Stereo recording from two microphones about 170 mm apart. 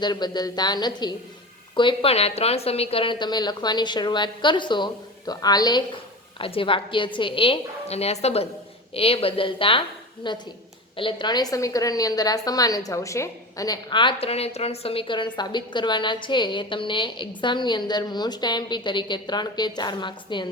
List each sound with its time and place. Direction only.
0.0 s a woman's voice: 25° left (ahead or behind)